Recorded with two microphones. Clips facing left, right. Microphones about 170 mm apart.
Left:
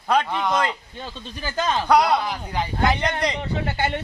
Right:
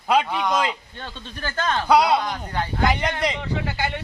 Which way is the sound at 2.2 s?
10° left (ahead or behind).